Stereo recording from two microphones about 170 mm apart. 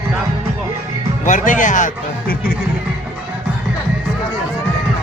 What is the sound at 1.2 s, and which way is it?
A man's voice, 50° left (ahead or behind).